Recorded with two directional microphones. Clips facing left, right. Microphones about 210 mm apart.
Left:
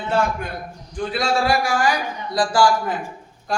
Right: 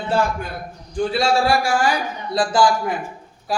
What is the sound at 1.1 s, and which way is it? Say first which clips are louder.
Speech: right 2 dB; 30° right (ahead or behind).